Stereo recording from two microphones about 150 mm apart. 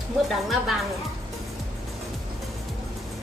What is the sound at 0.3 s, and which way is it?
Speech, centre (ahead or behind).